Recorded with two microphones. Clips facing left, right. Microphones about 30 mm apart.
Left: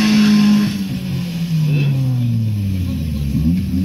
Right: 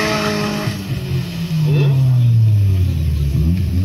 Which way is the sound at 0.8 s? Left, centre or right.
Right.